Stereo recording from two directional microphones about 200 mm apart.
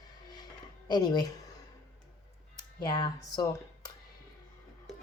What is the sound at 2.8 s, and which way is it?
Speech, 25° left (ahead or behind).